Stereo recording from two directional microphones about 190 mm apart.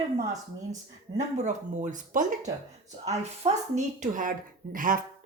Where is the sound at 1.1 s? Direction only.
40° right (ahead or behind).